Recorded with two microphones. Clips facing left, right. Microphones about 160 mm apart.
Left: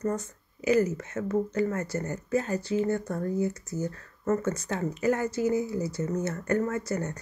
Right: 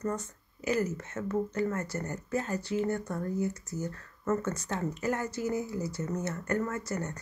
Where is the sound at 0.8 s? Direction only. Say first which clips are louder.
Left 6 dB; 40° left (ahead or behind).